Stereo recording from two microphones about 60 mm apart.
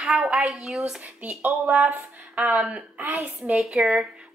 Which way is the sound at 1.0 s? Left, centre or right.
Right.